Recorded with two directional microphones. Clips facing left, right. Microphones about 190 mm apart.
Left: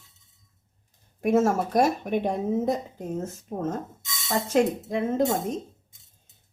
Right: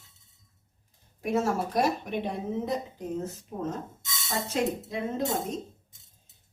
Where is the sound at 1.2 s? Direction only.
50° left (ahead or behind).